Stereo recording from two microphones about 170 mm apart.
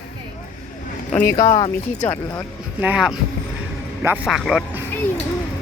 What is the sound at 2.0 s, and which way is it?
Speech, 10° left (ahead or behind).